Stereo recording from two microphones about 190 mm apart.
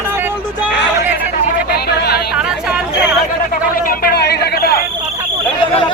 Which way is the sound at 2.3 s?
5° right (ahead or behind).